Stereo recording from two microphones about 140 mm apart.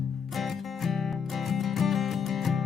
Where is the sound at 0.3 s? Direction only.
Centre (ahead or behind).